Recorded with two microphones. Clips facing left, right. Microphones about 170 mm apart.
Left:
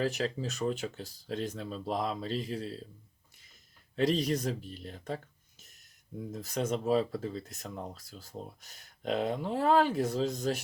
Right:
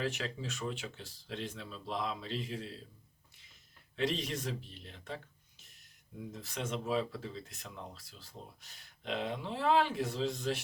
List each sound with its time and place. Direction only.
0.0 s speech: 40° left (ahead or behind)
3.9 s speech: 40° left (ahead or behind)